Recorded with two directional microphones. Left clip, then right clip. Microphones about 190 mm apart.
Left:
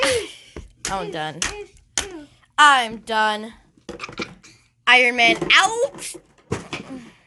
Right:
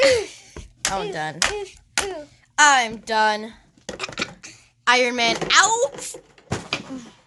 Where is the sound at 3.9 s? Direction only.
55° right (ahead or behind).